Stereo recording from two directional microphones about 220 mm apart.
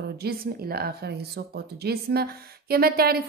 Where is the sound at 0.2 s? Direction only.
45° right (ahead or behind).